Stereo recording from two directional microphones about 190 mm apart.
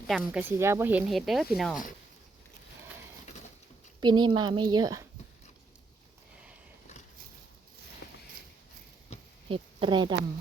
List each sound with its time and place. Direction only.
0.1 s speech: 5° right (ahead or behind)
4.0 s speech: 25° right (ahead or behind)
8.0 s a sound: 65° left (ahead or behind)
9.5 s a woman's voice: 25° right (ahead or behind)